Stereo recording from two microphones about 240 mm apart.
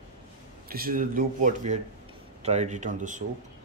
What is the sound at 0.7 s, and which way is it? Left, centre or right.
Speech, right.